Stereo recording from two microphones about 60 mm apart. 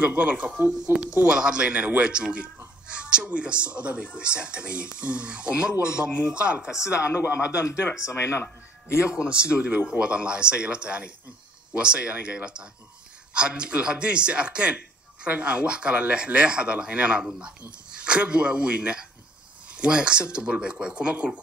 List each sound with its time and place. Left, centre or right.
0.0 s speech: right; by 6.9 s centre
6.9 s a man's voice: left
9.1 s speech: centre